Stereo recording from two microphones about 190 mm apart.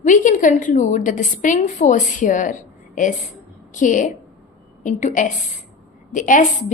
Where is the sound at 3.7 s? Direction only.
40° left (ahead or behind).